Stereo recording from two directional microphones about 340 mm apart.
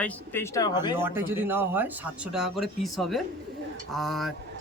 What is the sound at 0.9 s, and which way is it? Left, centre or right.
Speech, centre.